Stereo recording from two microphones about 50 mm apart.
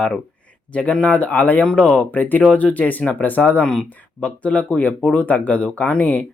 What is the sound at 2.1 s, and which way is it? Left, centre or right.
Speech, left.